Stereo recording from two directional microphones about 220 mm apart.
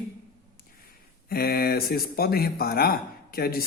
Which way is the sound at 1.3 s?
45° left (ahead or behind).